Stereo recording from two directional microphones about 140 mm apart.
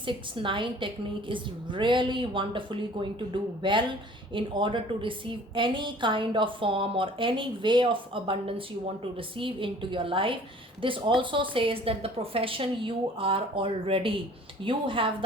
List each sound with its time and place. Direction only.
0.0 s a woman's voice: 35° right (ahead or behind)